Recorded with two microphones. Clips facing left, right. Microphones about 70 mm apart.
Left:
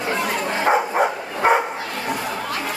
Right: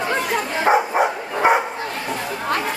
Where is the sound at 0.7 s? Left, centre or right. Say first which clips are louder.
Right 2 dB; centre.